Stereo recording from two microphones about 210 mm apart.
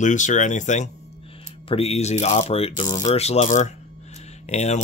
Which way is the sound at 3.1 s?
30° left (ahead or behind).